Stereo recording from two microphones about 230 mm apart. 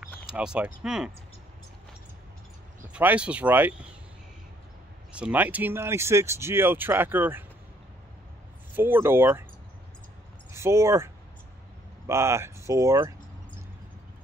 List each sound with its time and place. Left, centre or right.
0.3 s speech: centre
2.9 s speech: centre
5.1 s speech: centre
8.7 s speech: centre
10.5 s speech: centre
12.1 s speech: centre